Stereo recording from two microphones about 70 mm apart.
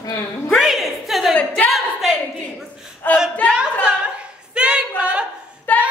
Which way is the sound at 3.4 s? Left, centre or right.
Centre.